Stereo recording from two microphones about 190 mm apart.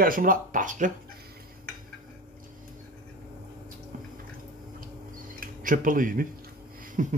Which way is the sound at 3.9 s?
45° right (ahead or behind).